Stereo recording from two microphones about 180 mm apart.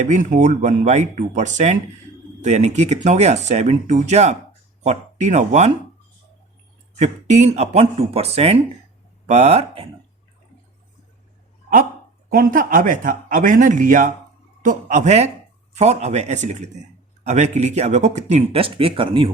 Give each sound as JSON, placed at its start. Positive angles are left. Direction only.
{"t": 0.0, "sound": "speech", "side_deg": -45}
{"t": 7.0, "sound": "speech", "side_deg": -40}
{"t": 12.3, "sound": "a man's voice", "side_deg": -50}